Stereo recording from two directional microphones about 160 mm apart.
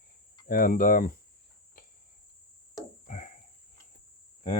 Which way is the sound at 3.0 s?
50° left (ahead or behind).